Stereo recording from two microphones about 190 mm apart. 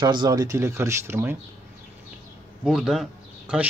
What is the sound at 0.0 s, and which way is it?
Speech, 20° right (ahead or behind).